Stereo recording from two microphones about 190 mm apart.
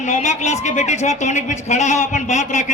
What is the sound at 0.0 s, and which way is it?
Speech, 35° left (ahead or behind).